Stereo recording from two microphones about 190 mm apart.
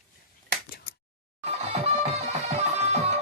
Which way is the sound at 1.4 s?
35° right (ahead or behind).